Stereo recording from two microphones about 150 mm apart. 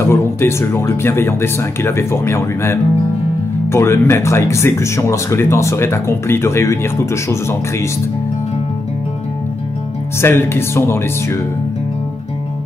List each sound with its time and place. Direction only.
0.0 s speech: 15° left (ahead or behind)
10.2 s speech: 15° left (ahead or behind)